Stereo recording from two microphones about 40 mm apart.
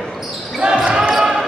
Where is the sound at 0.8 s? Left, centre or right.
Right.